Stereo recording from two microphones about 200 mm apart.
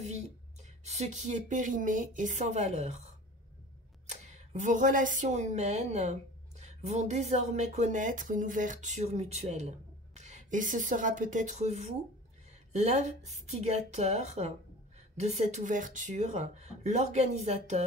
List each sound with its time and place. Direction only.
0.0 s speech: 35° right (ahead or behind)
4.1 s speech: 35° right (ahead or behind)